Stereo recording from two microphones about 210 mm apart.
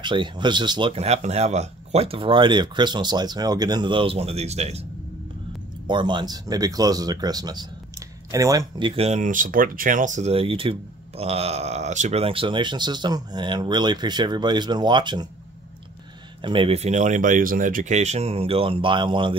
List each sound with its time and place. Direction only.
0.0 s speech: 20° right (ahead or behind)
5.9 s speech: 20° right (ahead or behind)
16.3 s speech: 25° right (ahead or behind)